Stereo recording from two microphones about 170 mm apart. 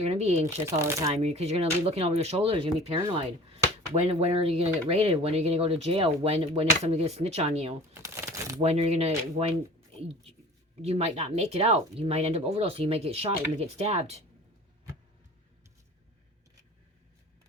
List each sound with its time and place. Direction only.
0.0 s speech: 35° right (ahead or behind)
0.6 s speech: 15° right (ahead or behind)
1.1 s speech: 40° right (ahead or behind)
4.0 s speech: 35° right (ahead or behind)
7.9 s crumpling: 15° right (ahead or behind)
8.6 s speech: 40° right (ahead or behind)
10.8 s speech: 35° right (ahead or behind)